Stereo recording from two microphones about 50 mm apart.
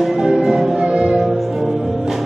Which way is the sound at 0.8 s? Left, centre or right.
Centre.